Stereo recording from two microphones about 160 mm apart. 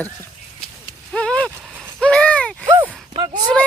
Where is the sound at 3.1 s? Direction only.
30° right (ahead or behind).